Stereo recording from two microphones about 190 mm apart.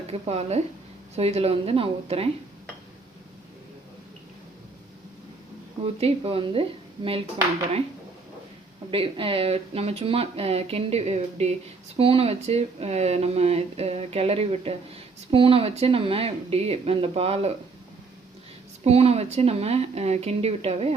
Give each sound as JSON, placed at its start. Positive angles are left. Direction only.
{"t": 0.1, "sound": "speech", "side_deg": -30}
{"t": 5.8, "sound": "speech", "side_deg": -30}
{"t": 8.9, "sound": "speech", "side_deg": -30}
{"t": 18.9, "sound": "speech", "side_deg": -35}